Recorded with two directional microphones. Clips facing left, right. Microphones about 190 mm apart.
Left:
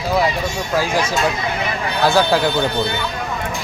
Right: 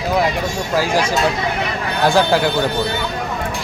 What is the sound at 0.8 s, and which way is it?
Speech, 10° right (ahead or behind).